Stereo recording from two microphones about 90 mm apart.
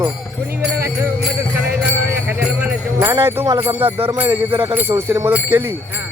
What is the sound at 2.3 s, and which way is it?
Speech, 20° right (ahead or behind).